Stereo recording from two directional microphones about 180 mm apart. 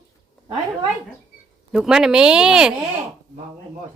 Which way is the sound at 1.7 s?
5° right (ahead or behind).